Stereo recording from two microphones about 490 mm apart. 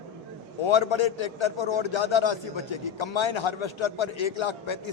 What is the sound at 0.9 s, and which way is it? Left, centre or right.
A man's voice, left.